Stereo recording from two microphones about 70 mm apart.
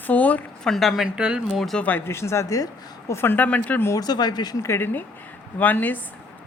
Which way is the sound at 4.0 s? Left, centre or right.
Left.